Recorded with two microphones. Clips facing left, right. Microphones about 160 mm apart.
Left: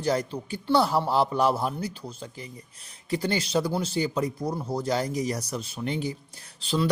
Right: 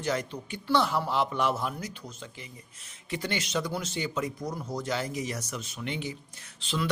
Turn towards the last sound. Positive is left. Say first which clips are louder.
# left 5 dB
turn(degrees=35)  # may be behind; listen again after turning